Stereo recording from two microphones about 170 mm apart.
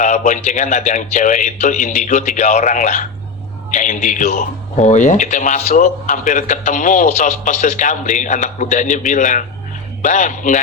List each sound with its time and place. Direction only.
0.0 s speech: 50° left (ahead or behind)